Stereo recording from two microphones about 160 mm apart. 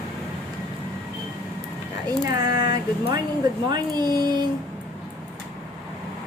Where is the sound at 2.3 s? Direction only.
25° right (ahead or behind).